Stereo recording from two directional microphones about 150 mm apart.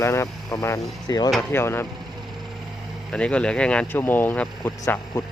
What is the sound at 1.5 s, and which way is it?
Speech, 15° left (ahead or behind).